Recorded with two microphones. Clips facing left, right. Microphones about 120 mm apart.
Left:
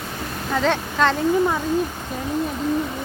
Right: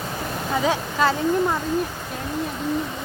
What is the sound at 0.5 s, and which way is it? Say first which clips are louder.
Speech: left 2 dB; 10° right (ahead or behind).